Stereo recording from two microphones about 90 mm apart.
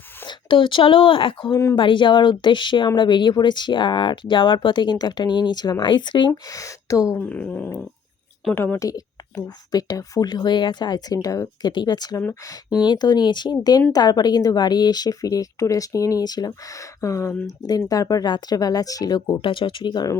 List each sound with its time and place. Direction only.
0.3 s speech: 65° left (ahead or behind)
1.7 s speech: 65° left (ahead or behind); by 5.8 s 50° left (ahead or behind)
5.8 s speech: 60° left (ahead or behind)
6.5 s speech: 40° left (ahead or behind)
7.2 s a woman's voice: 15° left (ahead or behind)
8.8 s speech: 40° left (ahead or behind)
11.7 s speech: 55° left (ahead or behind)
17.0 s speech: 35° left (ahead or behind)
17.6 s speech: 45° left (ahead or behind)
19.3 s speech: 70° left (ahead or behind); by 20.1 s 55° left (ahead or behind)